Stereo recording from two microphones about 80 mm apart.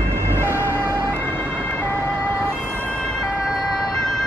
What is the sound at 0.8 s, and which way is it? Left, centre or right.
Ambulance, right.